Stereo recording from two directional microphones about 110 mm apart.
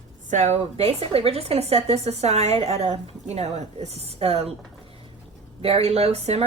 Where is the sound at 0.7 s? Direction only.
60° right (ahead or behind).